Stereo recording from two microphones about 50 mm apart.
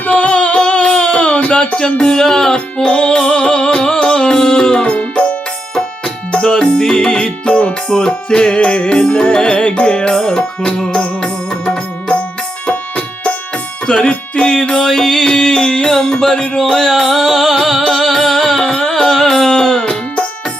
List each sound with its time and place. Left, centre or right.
0.1 s music: left
6.3 s music: centre
13.8 s speech: centre
14.8 s a sound: centre
15.3 s music: centre
16.2 s a sound: centre
16.6 s music: centre